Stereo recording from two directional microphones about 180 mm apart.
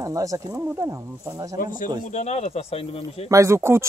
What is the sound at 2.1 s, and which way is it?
Speech, 40° left (ahead or behind).